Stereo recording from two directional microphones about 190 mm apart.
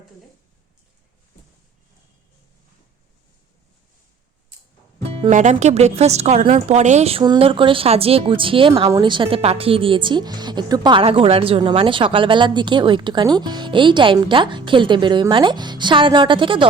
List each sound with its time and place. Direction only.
5.3 s a woman's voice: 40° right (ahead or behind)